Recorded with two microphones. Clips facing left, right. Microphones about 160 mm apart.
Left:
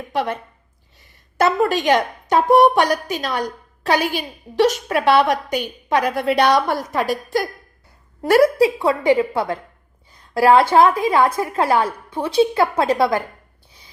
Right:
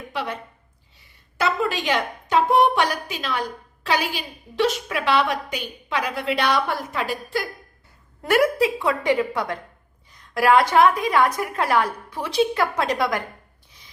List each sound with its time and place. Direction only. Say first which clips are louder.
0.1 s a woman's voice: left 7 dB; 45° left (ahead or behind)
1.4 s a woman's voice: left 6 dB; 50° left (ahead or behind); by 13.2 s 25° left (ahead or behind)